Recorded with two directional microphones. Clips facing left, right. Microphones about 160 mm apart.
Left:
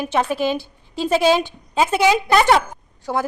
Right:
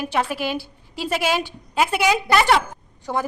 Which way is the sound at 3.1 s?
10° left (ahead or behind).